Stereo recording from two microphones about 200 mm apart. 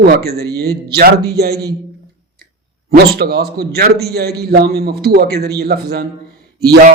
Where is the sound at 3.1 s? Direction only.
50° right (ahead or behind).